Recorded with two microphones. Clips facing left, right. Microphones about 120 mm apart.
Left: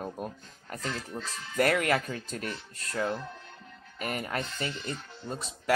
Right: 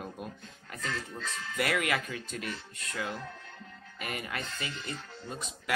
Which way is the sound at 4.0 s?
40° left (ahead or behind).